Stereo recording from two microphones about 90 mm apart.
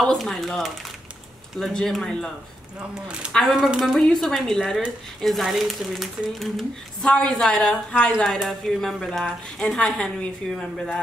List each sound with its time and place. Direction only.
0.0 s a woman's voice: 5° left (ahead or behind)
2.9 s a woman's voice: 10° right (ahead or behind)